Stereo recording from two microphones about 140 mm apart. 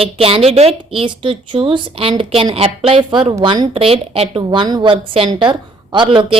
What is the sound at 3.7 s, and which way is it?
A woman's voice, 45° right (ahead or behind).